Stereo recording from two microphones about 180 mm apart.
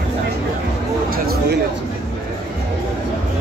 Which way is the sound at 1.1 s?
60° right (ahead or behind).